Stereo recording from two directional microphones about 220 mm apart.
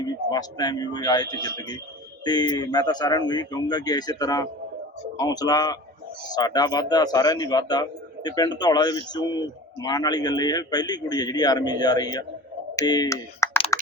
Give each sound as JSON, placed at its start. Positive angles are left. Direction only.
{"t": 0.0, "sound": "a man's voice", "side_deg": 20}